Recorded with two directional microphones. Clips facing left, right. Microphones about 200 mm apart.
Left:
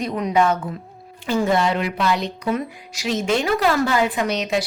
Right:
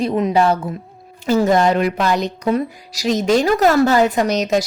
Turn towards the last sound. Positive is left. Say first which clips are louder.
# right 5 dB
turn(degrees=-40)  # may be behind; listen again after turning